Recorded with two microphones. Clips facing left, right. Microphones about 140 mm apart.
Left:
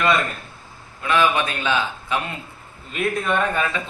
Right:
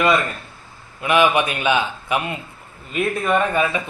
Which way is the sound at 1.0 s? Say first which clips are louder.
Right 3 dB; 15° right (ahead or behind).